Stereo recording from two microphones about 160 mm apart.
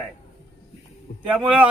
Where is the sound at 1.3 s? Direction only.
10° right (ahead or behind).